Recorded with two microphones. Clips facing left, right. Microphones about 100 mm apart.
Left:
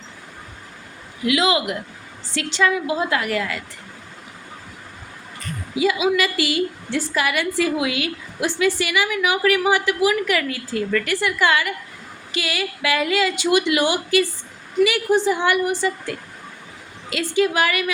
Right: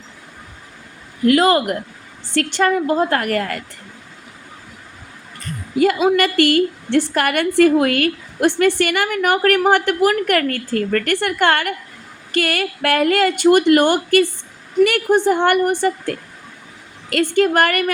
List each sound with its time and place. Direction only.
1.2 s a woman's voice: 45° right (ahead or behind)
5.7 s a woman's voice: 55° right (ahead or behind)